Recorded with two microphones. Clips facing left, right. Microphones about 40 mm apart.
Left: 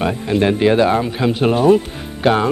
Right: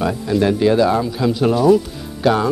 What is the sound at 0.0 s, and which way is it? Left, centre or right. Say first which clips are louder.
Speech: left 1 dB; left.